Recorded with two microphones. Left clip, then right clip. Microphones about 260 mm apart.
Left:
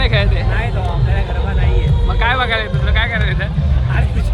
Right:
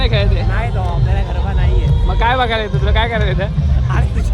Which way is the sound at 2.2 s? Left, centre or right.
Right.